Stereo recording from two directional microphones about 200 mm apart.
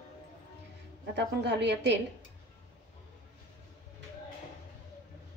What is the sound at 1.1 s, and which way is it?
Speech, 60° right (ahead or behind).